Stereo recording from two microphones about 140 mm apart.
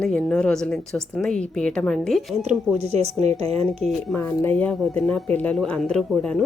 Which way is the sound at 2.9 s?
50° right (ahead or behind).